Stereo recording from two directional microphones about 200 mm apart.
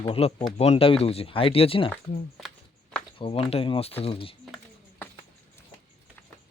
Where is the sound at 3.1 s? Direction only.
25° left (ahead or behind).